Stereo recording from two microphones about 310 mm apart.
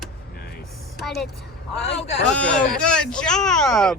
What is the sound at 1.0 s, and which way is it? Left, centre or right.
Speech, centre.